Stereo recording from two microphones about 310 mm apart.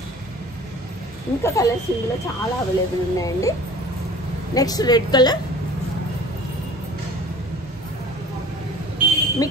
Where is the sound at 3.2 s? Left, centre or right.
Centre.